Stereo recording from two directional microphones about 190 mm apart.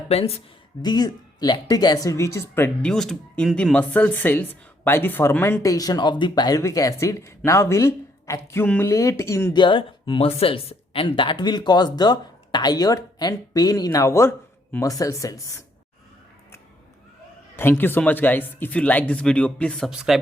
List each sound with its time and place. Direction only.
0.1 s speech: 30° left (ahead or behind)
17.6 s speech: 10° left (ahead or behind)